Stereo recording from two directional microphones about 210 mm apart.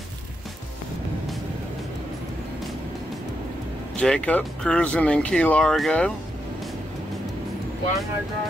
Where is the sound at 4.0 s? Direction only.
5° left (ahead or behind).